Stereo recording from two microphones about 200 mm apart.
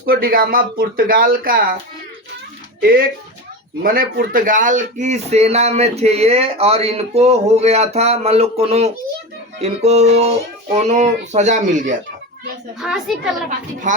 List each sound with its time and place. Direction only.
0.0 s speech: 45° right (ahead or behind)
2.8 s speech: 45° right (ahead or behind)
12.8 s a woman's voice: centre (ahead or behind)
13.9 s speech: 40° right (ahead or behind)